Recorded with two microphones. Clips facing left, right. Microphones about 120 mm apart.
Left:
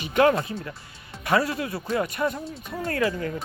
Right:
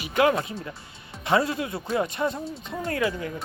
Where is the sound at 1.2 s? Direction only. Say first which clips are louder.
Even; 25° right (ahead or behind).